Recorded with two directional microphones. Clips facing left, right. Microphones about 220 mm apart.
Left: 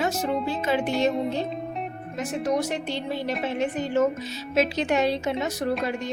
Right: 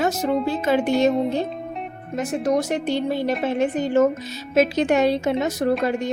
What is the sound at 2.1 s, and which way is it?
A woman's voice, 45° right (ahead or behind).